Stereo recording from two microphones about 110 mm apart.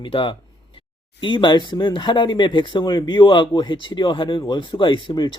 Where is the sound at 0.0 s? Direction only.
50° left (ahead or behind).